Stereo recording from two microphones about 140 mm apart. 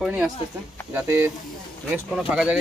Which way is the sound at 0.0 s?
5° right (ahead or behind).